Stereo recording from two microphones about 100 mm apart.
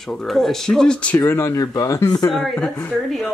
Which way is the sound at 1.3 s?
30° left (ahead or behind).